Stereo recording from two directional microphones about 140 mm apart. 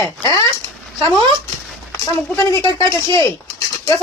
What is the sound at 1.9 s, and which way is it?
Speech, 25° left (ahead or behind).